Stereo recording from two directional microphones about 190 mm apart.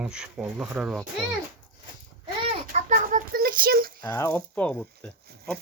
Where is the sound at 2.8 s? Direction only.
45° right (ahead or behind).